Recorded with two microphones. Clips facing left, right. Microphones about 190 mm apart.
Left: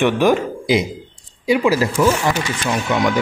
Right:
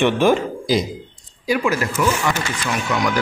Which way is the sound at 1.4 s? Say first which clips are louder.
Left 4 dB; 25° left (ahead or behind).